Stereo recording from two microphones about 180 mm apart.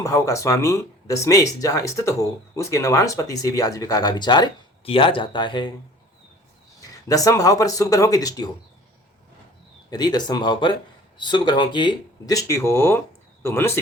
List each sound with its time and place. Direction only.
0.0 s speech: 15° left (ahead or behind)
6.8 s speech: 20° left (ahead or behind)
9.9 s speech: 20° left (ahead or behind)